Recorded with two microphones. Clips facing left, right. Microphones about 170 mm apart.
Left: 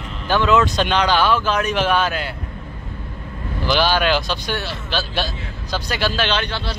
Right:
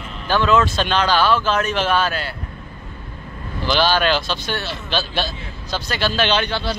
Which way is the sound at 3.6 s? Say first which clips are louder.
Even; 10° left (ahead or behind).